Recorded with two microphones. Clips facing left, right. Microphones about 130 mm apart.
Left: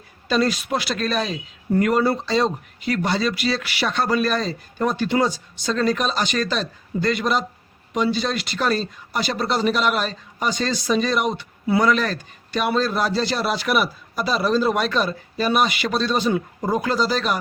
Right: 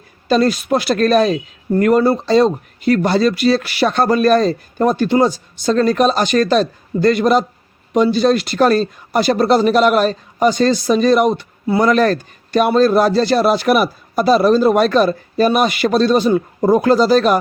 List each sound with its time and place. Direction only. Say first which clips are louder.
0.3 s speech: right 6 dB; 45° right (ahead or behind)